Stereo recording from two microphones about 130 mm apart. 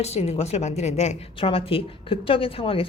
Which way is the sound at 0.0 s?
55° left (ahead or behind).